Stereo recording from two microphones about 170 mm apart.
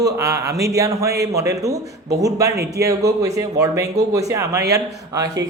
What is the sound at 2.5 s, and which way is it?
Speech, 70° right (ahead or behind).